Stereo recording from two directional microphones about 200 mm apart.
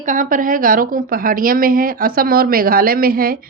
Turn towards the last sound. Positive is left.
turn(degrees=-45)  # may be behind; listen again after turning